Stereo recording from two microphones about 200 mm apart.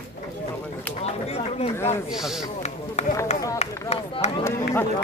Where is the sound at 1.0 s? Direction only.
30° left (ahead or behind).